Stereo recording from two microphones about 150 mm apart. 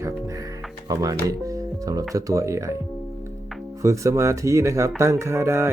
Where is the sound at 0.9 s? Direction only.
20° right (ahead or behind).